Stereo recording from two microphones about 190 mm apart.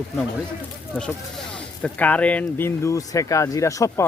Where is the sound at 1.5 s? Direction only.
5° left (ahead or behind).